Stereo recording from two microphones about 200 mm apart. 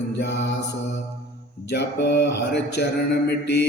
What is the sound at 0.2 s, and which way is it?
Mantra, 60° left (ahead or behind).